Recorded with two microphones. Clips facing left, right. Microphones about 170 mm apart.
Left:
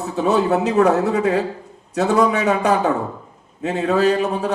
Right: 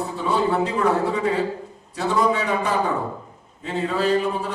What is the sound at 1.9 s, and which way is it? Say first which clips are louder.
Speech: left 4 dB; 85° left.